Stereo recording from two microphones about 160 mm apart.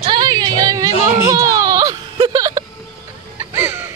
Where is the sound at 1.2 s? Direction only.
20° right (ahead or behind).